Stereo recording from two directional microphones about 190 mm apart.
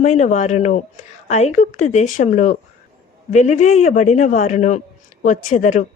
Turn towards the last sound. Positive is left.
turn(degrees=40)  # may be behind; listen again after turning